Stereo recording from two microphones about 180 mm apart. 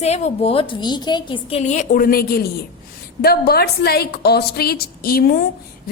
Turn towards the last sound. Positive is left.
turn(degrees=60)  # may be behind; listen again after turning